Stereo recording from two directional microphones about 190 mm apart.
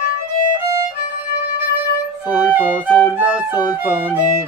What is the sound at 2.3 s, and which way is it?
Music, 10° right (ahead or behind).